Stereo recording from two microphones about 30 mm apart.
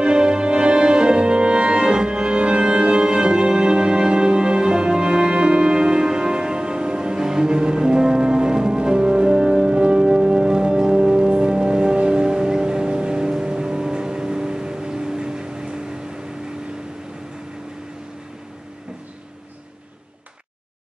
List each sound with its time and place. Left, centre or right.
0.0 s music: right